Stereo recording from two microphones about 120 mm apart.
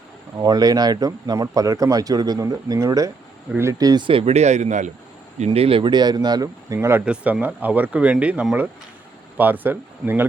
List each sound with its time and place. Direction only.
0.3 s speech: 35° right (ahead or behind)
4.4 s speech: 70° right (ahead or behind)
5.5 s speech: 50° right (ahead or behind); by 6.7 s 30° right (ahead or behind)
6.7 s speech: 15° right (ahead or behind)